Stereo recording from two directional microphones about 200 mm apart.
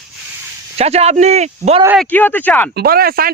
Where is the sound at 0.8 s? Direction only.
30° right (ahead or behind).